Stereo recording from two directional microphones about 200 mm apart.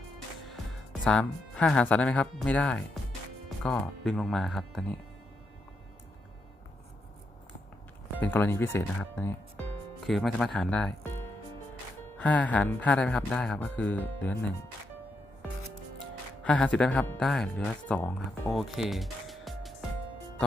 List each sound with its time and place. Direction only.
1.0 s speech: 5° left (ahead or behind)
8.2 s speech: 10° left (ahead or behind)
10.1 s speech: centre (ahead or behind)
12.1 s speech: 5° left (ahead or behind)
16.4 s speech: 5° left (ahead or behind)
18.5 s music: centre (ahead or behind)